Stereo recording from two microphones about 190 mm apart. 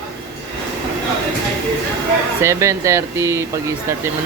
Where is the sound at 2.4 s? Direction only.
15° right (ahead or behind).